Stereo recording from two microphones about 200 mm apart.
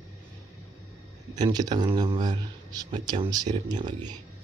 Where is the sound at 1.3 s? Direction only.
20° right (ahead or behind).